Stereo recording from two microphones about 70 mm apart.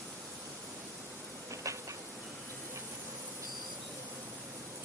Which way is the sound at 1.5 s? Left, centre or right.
Right.